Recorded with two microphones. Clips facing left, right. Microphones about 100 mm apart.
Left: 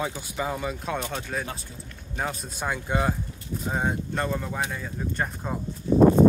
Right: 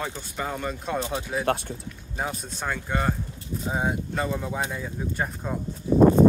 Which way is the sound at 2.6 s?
10° left (ahead or behind).